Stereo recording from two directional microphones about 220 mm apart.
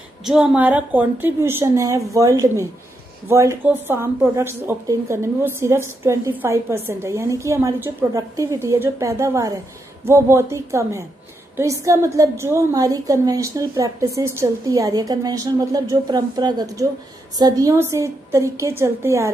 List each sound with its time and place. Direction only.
0.2 s a woman's voice: 5° right (ahead or behind)